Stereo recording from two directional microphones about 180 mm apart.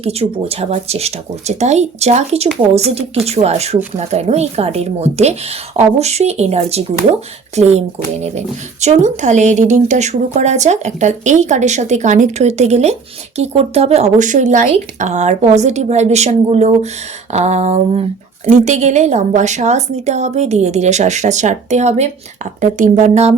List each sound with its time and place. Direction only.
0.0 s speech: 35° right (ahead or behind)